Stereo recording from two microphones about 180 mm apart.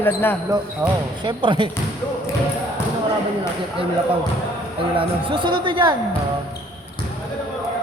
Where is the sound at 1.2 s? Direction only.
25° right (ahead or behind).